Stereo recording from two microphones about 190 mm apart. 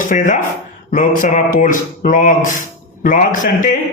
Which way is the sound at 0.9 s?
45° left (ahead or behind).